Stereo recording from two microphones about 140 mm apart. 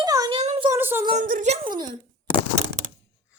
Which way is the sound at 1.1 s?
65° right (ahead or behind).